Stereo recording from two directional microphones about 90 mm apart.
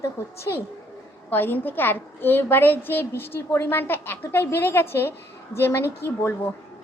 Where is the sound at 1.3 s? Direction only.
20° left (ahead or behind).